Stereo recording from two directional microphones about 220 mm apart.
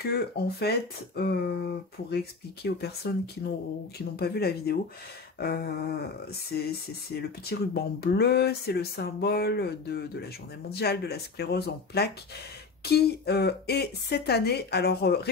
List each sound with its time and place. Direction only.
0.0 s speech: 45° left (ahead or behind)
7.2 s speech: 45° left (ahead or behind)